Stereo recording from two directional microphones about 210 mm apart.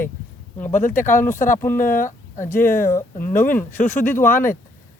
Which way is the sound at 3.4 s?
10° left (ahead or behind).